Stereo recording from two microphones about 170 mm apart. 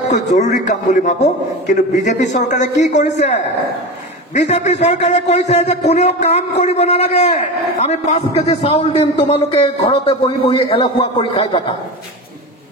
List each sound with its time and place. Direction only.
0.1 s a man's voice: 45° left (ahead or behind)